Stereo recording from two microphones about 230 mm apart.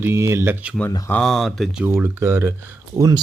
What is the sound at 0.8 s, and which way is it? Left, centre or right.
Speech, centre.